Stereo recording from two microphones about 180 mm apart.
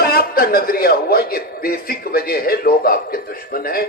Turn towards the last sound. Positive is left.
turn(degrees=55)  # may be behind; listen again after turning